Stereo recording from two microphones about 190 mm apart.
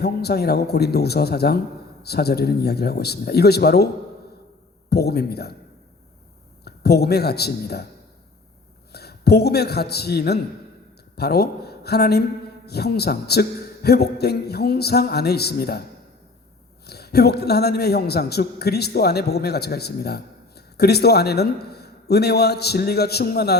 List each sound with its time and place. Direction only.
0.0 s a man's voice: 55° left (ahead or behind)
4.9 s a man's voice: 55° left (ahead or behind)
6.7 s a man's voice: 55° left (ahead or behind)
8.9 s a man's voice: 55° left (ahead or behind)
16.8 s a man's voice: 55° left (ahead or behind)